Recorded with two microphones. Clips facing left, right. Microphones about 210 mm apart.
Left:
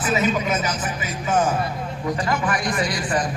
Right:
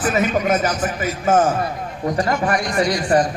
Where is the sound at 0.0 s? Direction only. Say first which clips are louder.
Right 3 dB; 55° right (ahead or behind).